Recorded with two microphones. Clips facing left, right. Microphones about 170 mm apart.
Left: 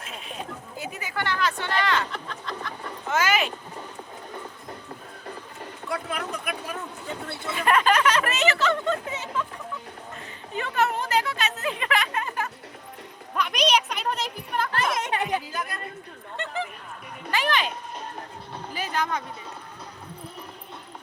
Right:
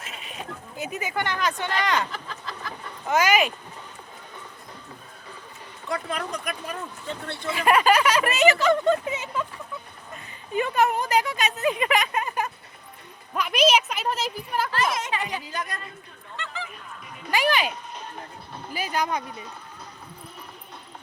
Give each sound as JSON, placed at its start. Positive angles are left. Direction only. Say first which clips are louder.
{"t": 0.0, "sound": "sheep", "louder": "left 2 dB", "side_deg": -5}
{"t": 0.8, "sound": "speech", "louder": "right 3 dB", "side_deg": -20}
{"t": 2.1, "sound": "a sound", "louder": "left 2 dB", "side_deg": 0}
{"t": 3.1, "sound": "speech", "louder": "right 3 dB", "side_deg": -15}
{"t": 5.9, "sound": "speech", "louder": "right 2 dB", "side_deg": 5}
{"t": 7.5, "sound": "speech", "louder": "right 2 dB", "side_deg": -10}
{"t": 10.5, "sound": "speech", "louder": "right 3 dB", "side_deg": -15}
{"t": 13.3, "sound": "speech", "louder": "right 3 dB", "side_deg": -5}
{"t": 14.9, "sound": "speech", "louder": "left 3 dB", "side_deg": 60}
{"t": 15.4, "sound": "speech", "louder": "even", "side_deg": 5}
{"t": 16.4, "sound": "honk", "louder": "left 5 dB", "side_deg": 55}
{"t": 17.3, "sound": "speech", "louder": "right 2 dB", "side_deg": -10}
{"t": 18.7, "sound": "speech", "louder": "right 2 dB", "side_deg": -10}